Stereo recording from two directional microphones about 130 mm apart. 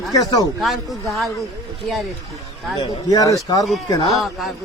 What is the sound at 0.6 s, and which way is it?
Speech, centre (ahead or behind).